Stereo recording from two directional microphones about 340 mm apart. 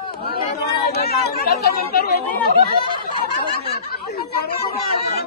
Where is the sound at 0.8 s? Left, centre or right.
Left.